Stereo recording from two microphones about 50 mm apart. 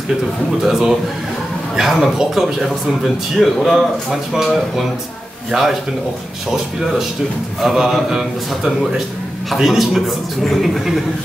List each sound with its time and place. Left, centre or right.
0.7 s a man's voice: centre
7.6 s a man's voice: centre